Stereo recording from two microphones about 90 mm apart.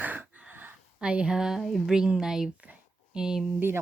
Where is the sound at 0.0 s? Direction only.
20° right (ahead or behind).